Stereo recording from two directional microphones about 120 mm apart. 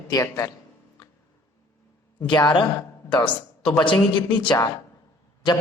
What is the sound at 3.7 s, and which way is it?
Speech, 40° left (ahead or behind).